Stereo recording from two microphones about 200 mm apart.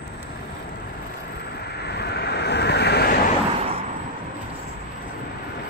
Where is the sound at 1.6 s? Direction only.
55° left (ahead or behind).